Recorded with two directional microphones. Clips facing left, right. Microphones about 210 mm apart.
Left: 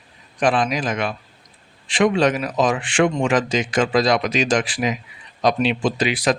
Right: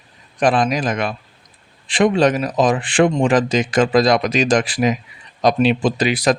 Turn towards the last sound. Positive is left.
turn(degrees=-40)  # may be behind; listen again after turning